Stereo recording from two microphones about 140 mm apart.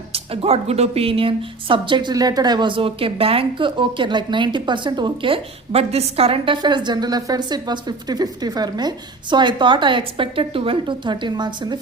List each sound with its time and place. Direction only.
0.1 s speech: 45° right (ahead or behind)